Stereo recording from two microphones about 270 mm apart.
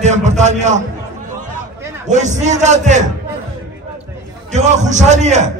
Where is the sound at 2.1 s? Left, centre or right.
Right.